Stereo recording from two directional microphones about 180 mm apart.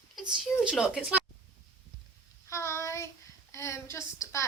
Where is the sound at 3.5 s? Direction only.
15° left (ahead or behind).